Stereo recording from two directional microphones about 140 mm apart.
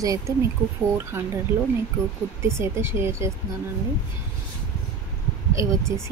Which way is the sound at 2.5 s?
20° right (ahead or behind).